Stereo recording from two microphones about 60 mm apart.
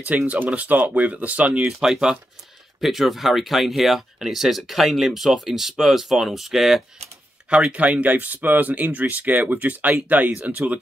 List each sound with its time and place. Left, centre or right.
0.3 s speech: right
1.8 s speech: centre
7.4 s speech: centre